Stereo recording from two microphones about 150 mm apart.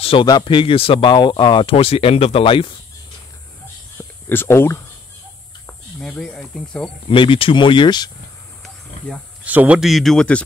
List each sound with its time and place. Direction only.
0.0 s speech: 35° left (ahead or behind)
4.3 s speech: 15° left (ahead or behind)
5.9 s speech: 5° left (ahead or behind)
7.1 s speech: 35° left (ahead or behind)
9.4 s speech: 10° right (ahead or behind); by 10.4 s 5° left (ahead or behind)